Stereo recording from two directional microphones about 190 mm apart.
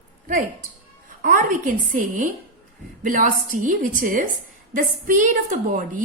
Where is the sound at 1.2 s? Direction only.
45° right (ahead or behind).